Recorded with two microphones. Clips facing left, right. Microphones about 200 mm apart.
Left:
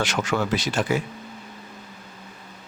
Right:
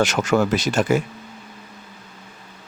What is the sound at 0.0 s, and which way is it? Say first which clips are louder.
Speech: right 6 dB; 45° right (ahead or behind).